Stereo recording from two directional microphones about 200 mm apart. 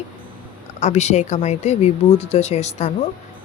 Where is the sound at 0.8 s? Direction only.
35° left (ahead or behind).